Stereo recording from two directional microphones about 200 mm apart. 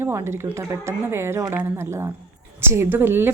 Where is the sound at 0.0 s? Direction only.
15° right (ahead or behind).